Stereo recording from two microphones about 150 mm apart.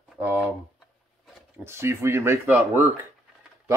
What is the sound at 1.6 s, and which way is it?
Speech, 15° right (ahead or behind).